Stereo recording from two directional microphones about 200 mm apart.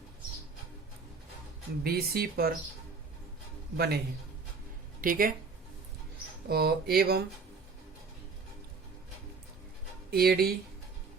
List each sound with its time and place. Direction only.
1.8 s speech: 50° right (ahead or behind)
3.8 s speech: 50° right (ahead or behind)
6.5 s speech: 50° right (ahead or behind)
10.1 s speech: 50° right (ahead or behind)